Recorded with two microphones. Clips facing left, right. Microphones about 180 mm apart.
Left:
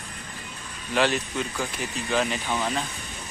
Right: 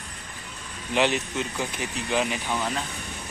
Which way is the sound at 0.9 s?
20° right (ahead or behind).